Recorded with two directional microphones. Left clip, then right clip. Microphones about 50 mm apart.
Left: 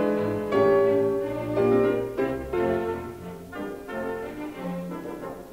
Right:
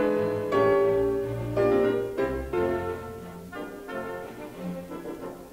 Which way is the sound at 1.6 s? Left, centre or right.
Left.